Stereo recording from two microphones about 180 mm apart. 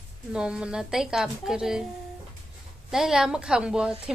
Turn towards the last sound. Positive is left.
turn(degrees=-5)  # may be behind; listen again after turning